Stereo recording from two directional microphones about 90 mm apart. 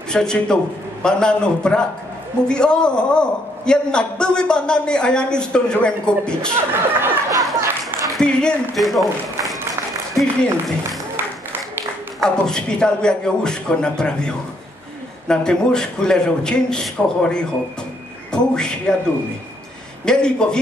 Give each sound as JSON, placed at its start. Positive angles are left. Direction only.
{"t": 0.1, "sound": "a man's voice", "side_deg": 5}
{"t": 6.7, "sound": "speech", "side_deg": -25}
{"t": 7.2, "sound": "a sound", "side_deg": -40}
{"t": 8.1, "sound": "a man's voice", "side_deg": 10}
{"t": 12.2, "sound": "a man's voice", "side_deg": 10}
{"t": 20.1, "sound": "a man's voice", "side_deg": 10}